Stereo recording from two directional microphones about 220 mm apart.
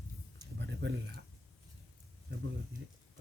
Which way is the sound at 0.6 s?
50° right (ahead or behind).